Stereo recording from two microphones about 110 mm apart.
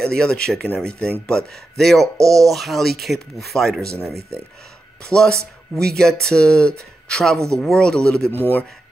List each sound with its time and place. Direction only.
0.0 s speech: 10° left (ahead or behind)
5.0 s speech: 5° left (ahead or behind)
8.3 s speech: 15° left (ahead or behind)